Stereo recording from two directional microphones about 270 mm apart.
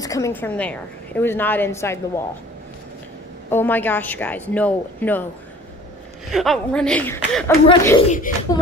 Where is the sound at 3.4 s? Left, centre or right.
Centre.